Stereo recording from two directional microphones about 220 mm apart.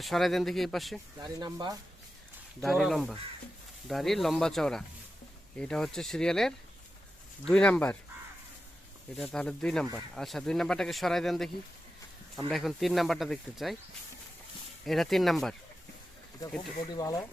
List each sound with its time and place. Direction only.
0.0 s speech: centre (ahead or behind)
1.2 s speech: 20° right (ahead or behind)
2.6 s speech: centre (ahead or behind)
9.1 s speech: 5° left (ahead or behind)
14.8 s speech: centre (ahead or behind)
16.4 s speech: 15° left (ahead or behind)